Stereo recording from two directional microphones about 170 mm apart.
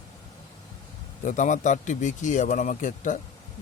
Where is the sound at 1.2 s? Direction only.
50° left (ahead or behind).